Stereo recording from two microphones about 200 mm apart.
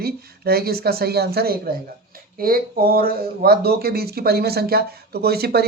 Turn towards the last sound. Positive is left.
turn(degrees=-50)  # may be behind; listen again after turning